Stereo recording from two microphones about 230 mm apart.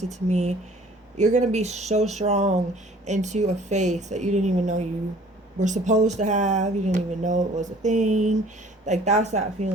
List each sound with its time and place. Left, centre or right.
0.0 s speech: right